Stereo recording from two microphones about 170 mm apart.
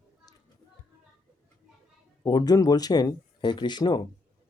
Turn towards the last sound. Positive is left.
turn(degrees=25)  # may be behind; listen again after turning